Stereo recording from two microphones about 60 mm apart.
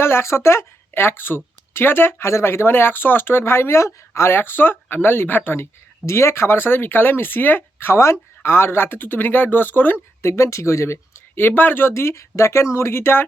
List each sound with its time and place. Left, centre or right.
0.0 s speech: left
6.1 s speech: left
7.9 s speech: left
8.4 s speech: left
10.2 s speech: left
11.3 s speech: left